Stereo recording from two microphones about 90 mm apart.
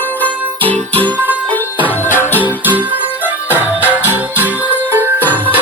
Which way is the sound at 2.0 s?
25° left (ahead or behind).